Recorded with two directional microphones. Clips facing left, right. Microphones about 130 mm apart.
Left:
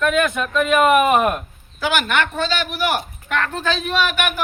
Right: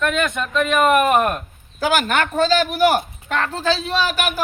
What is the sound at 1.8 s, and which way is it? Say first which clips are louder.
Speech: right 1 dB; 40° right (ahead or behind).